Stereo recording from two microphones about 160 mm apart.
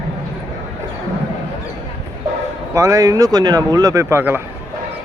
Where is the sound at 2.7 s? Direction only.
20° right (ahead or behind).